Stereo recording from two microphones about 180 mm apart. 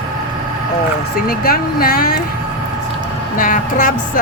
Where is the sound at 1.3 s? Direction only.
55° left (ahead or behind).